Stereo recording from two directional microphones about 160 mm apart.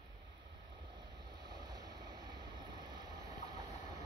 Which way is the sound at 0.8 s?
30° right (ahead or behind).